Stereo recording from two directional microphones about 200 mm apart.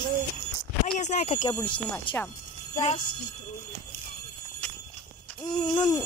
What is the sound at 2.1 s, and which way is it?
Speech, 25° left (ahead or behind).